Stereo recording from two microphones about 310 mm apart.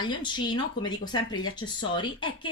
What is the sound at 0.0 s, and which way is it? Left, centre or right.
A woman's voice, centre.